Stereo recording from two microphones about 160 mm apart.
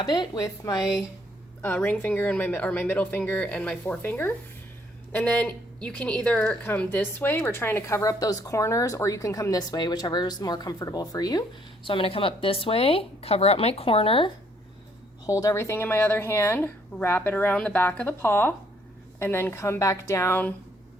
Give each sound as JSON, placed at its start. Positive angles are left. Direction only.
{"t": 0.0, "sound": "a woman's voice", "side_deg": 25}
{"t": 1.6, "sound": "a woman's voice", "side_deg": 10}
{"t": 15.3, "sound": "speech", "side_deg": 20}